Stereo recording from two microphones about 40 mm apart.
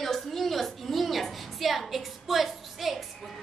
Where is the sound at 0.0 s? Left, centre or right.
Centre.